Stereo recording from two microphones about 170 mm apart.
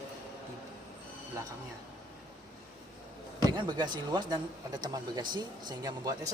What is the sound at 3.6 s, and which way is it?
Speech, 25° right (ahead or behind).